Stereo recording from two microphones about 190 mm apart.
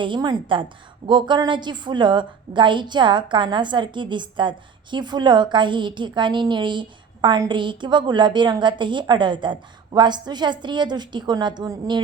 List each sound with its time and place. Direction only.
0.0 s a woman's voice: 25° right (ahead or behind)